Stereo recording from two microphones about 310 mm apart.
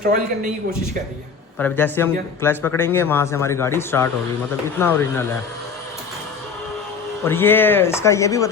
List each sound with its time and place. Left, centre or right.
0.0 s a man's voice: right
1.5 s speech: centre
7.3 s speech: centre